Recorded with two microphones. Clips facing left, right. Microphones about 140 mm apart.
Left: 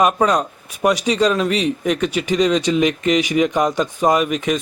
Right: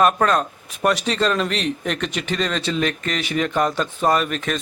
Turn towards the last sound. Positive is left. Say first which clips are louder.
# left 4 dB
turn(degrees=10)  # may be behind; listen again after turning